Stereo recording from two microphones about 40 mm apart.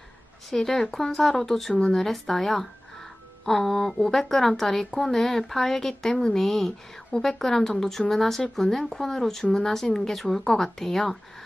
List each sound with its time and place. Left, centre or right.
0.5 s speech: centre
1.7 s speech: centre
2.0 s speech: centre